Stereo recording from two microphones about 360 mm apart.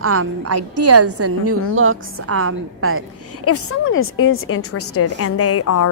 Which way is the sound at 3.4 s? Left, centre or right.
Left.